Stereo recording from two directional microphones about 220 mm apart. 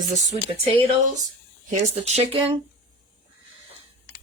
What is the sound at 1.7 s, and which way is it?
Speech, 30° right (ahead or behind).